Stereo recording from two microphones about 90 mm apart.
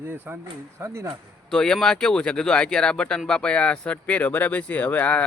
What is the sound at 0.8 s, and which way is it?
Speech, 35° right (ahead or behind).